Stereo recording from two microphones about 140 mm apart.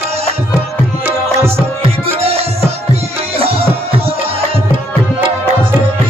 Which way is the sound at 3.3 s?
45° right (ahead or behind).